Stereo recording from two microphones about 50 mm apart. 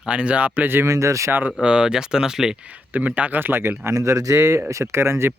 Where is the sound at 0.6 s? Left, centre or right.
Right.